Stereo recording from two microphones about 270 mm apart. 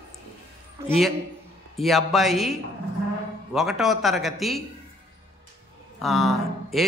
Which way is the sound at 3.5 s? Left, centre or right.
Centre.